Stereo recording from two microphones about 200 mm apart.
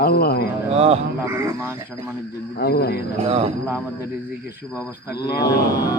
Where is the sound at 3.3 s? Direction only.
30° right (ahead or behind).